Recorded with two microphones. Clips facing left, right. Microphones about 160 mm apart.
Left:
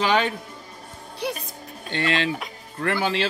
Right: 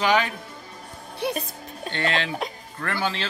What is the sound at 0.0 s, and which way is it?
Speech, 30° left (ahead or behind).